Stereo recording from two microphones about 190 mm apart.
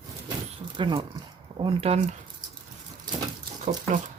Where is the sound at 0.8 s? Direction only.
25° right (ahead or behind).